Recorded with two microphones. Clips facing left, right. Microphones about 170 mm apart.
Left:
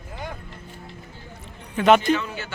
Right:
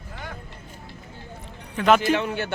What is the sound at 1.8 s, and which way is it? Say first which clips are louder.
Speech: left 2 dB; centre (ahead or behind).